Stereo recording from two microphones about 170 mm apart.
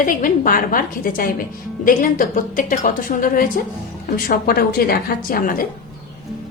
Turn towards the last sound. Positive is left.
turn(degrees=55)  # may be behind; listen again after turning